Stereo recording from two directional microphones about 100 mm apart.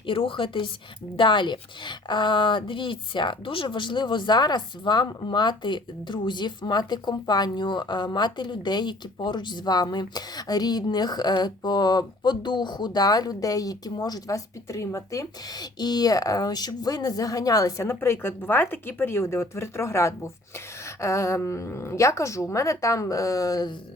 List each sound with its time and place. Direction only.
0.0 s a woman's voice: 60° left (ahead or behind); by 23.7 s 40° left (ahead or behind)